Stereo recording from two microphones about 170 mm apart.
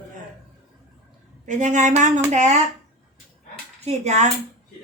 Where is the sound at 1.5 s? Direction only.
45° right (ahead or behind).